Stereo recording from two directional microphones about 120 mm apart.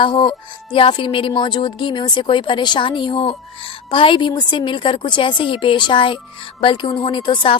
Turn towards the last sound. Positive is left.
turn(degrees=40)  # may be behind; listen again after turning